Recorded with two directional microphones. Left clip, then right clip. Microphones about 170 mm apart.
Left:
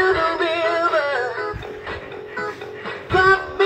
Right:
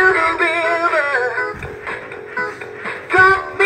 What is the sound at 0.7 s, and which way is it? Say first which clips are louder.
Music: right 3 dB; 20° right (ahead or behind).